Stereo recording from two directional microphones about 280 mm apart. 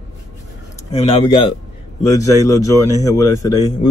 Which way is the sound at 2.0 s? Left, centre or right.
Centre.